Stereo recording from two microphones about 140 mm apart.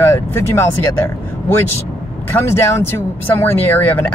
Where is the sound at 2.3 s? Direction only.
20° left (ahead or behind).